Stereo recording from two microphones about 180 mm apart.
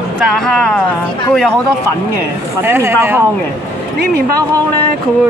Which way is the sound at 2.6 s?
15° right (ahead or behind).